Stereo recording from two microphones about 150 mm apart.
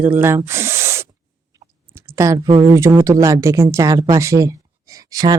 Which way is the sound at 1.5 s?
20° right (ahead or behind).